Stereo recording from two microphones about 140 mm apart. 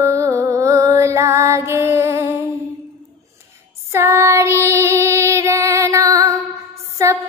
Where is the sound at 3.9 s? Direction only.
15° right (ahead or behind).